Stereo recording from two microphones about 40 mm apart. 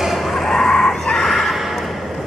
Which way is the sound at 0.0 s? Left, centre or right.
Centre.